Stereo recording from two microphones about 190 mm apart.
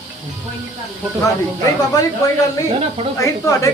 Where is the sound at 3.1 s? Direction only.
15° left (ahead or behind).